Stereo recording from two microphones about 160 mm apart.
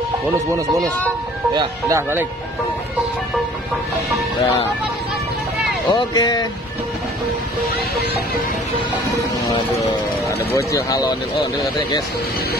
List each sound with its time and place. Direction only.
1.5 s speech: 30° right (ahead or behind)
2.0 s speech: 15° right (ahead or behind)
5.9 s speech: 25° left (ahead or behind)
10.2 s speech: 20° left (ahead or behind)